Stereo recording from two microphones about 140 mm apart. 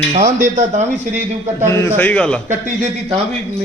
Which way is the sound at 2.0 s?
10° left (ahead or behind).